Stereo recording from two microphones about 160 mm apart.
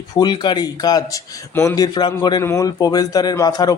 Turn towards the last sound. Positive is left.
turn(degrees=25)  # may be behind; listen again after turning